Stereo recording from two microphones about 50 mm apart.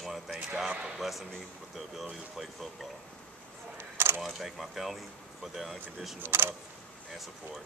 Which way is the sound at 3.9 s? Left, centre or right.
Right.